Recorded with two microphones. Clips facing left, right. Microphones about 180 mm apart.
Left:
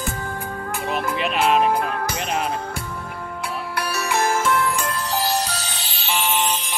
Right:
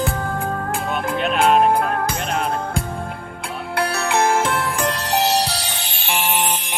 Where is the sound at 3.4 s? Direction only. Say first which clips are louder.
Right 5 dB; 55° right (ahead or behind).